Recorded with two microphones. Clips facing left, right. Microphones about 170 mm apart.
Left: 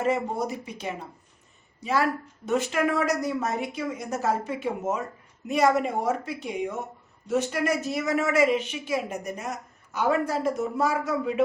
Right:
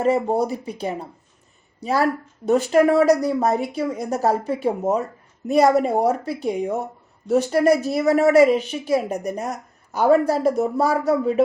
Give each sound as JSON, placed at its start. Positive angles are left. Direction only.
{"t": 0.0, "sound": "a woman's voice", "side_deg": -35}